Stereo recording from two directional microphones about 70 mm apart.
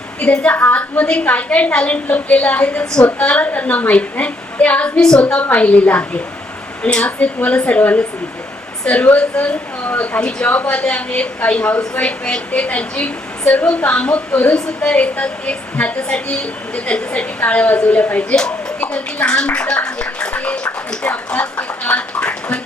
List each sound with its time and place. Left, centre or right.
0.5 s a woman's voice: left
4.9 s a woman's voice: centre
5.2 s a woman's voice: left
10.2 s a woman's voice: centre
10.5 s a woman's voice: left
21.8 s a sound: centre